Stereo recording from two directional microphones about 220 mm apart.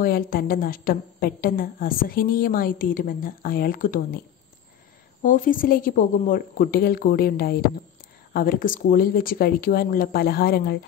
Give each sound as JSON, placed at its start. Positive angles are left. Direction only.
{"t": 0.0, "sound": "a woman's voice", "side_deg": 40}
{"t": 5.2, "sound": "a woman's voice", "side_deg": 35}